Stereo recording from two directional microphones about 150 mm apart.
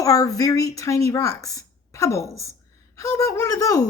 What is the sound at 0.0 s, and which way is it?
A woman's voice, 25° left (ahead or behind).